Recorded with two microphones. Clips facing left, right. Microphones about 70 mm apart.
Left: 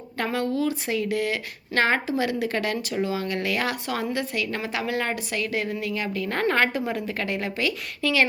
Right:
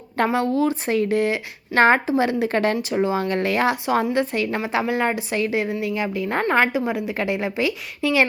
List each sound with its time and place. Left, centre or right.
0.2 s a woman's voice: right